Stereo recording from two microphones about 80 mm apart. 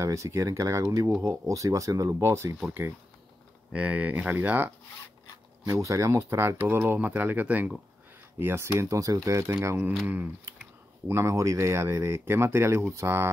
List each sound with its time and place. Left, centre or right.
0.0 s speech: right
3.7 s speech: centre
5.7 s speech: right; by 7.7 s centre
8.4 s speech: right
10.0 s speech: right
11.1 s speech: right